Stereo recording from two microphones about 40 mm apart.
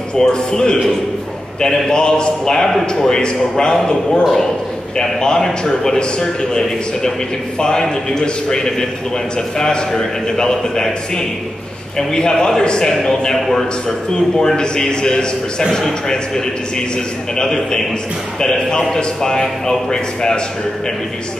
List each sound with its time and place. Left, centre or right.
0.2 s a man's voice: centre
1.9 s a man's voice: centre